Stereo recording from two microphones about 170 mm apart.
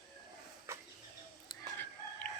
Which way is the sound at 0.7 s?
15° right (ahead or behind).